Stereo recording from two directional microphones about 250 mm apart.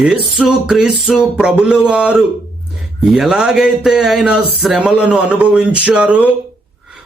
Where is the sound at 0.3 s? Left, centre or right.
Centre.